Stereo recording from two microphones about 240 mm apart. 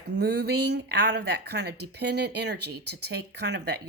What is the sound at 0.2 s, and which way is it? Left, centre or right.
Speech, right.